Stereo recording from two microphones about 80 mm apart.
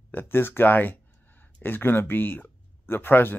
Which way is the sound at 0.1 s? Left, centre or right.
Left.